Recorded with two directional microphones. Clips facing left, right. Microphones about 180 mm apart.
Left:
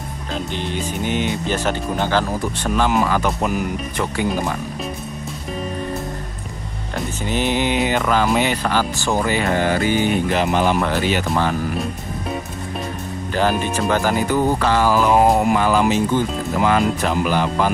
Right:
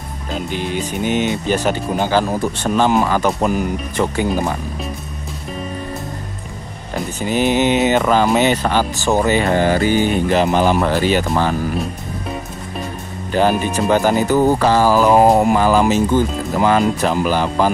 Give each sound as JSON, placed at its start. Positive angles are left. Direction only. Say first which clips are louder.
{"t": 0.3, "sound": "speech", "louder": "right 3 dB", "side_deg": -10}
{"t": 2.6, "sound": "speech", "louder": "right 3 dB", "side_deg": -30}
{"t": 7.2, "sound": "speech", "louder": "right 5 dB", "side_deg": -15}
{"t": 13.3, "sound": "speech", "louder": "right 4 dB", "side_deg": -15}
{"t": 14.3, "sound": "speech", "louder": "right 4 dB", "side_deg": -35}